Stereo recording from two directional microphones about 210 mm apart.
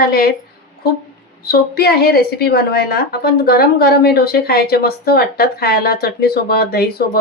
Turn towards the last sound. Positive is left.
turn(degrees=45)  # may be behind; listen again after turning